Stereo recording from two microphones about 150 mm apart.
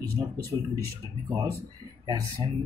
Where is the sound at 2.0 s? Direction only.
30° right (ahead or behind).